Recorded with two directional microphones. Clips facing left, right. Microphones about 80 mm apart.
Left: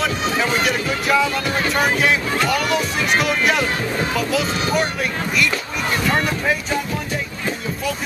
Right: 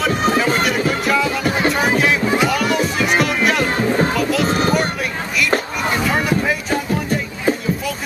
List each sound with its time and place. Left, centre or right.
0.1 s music: right
1.0 s music: centre
2.2 s music: centre
2.5 s music: centre
4.5 s vehicle: right
5.9 s crowd: centre